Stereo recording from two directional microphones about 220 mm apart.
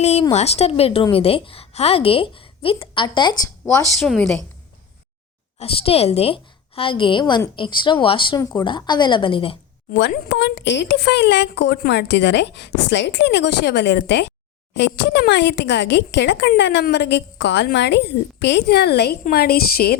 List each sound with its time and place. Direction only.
0.0 s a woman's voice: 30° left (ahead or behind)
3.7 s a woman's voice: 5° left (ahead or behind)
5.5 s a woman's voice: 25° left (ahead or behind)
9.9 s speech: 50° left (ahead or behind)